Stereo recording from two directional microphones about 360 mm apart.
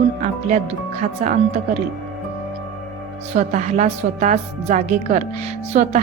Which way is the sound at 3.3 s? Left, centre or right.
Centre.